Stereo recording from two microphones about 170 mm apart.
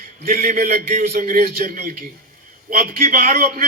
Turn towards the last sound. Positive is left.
turn(degrees=-55)  # may be behind; listen again after turning